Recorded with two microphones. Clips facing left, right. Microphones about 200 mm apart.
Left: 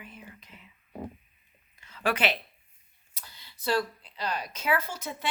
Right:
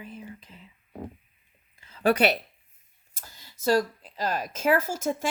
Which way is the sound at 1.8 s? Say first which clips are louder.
Right 6 dB; 35° right (ahead or behind).